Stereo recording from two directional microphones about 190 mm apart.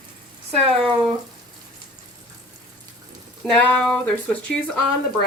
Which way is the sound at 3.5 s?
5° left (ahead or behind).